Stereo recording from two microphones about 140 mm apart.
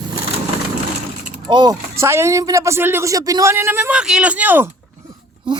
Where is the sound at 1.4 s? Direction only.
30° right (ahead or behind).